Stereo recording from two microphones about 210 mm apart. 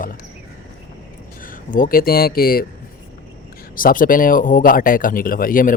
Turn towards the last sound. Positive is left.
turn(degrees=40)  # may be behind; listen again after turning